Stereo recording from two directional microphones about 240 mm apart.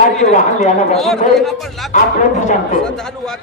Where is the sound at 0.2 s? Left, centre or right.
Left.